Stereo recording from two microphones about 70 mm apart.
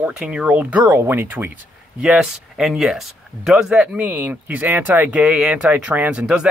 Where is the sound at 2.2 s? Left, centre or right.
Centre.